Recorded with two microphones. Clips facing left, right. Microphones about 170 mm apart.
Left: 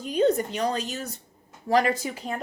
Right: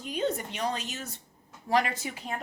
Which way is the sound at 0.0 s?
40° left (ahead or behind).